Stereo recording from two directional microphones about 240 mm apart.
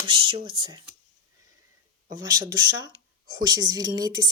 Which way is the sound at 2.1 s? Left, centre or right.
Centre.